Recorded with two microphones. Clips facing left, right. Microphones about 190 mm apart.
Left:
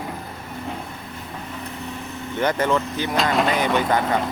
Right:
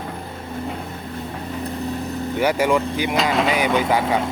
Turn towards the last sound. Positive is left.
turn(degrees=-5)  # may be behind; listen again after turning